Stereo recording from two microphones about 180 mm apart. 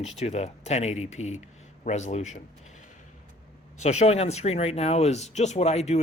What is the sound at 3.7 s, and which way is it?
Speech, 40° left (ahead or behind).